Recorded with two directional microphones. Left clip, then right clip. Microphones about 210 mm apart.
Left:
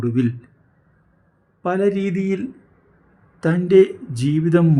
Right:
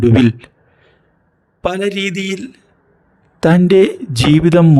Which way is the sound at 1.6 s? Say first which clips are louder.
Right 2 dB; 40° right (ahead or behind).